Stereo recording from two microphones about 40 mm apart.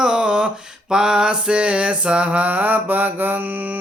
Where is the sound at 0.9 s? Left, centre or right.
Centre; by 3.4 s right.